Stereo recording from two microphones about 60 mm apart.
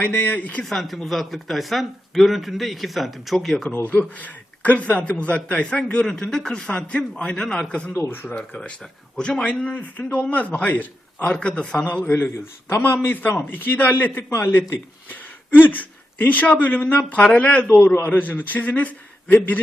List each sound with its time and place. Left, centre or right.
0.0 s a man's voice: left
0.6 s speech: centre
3.8 s a man's voice: left
7.9 s a man's voice: left
8.4 s a man's voice: centre
12.0 s a man's voice: left
15.1 s a man's voice: left
17.7 s a man's voice: left
18.0 s a man's voice: left